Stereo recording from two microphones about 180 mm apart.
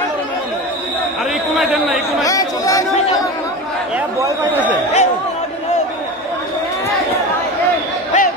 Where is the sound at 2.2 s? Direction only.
20° left (ahead or behind).